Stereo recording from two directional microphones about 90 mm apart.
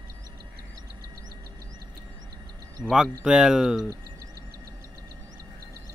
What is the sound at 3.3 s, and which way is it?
Speech, 5° right (ahead or behind).